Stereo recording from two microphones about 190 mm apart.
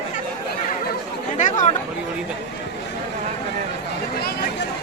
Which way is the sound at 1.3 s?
40° left (ahead or behind).